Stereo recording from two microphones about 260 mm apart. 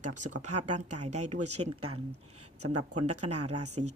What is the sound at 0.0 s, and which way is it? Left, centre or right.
A woman's voice, right.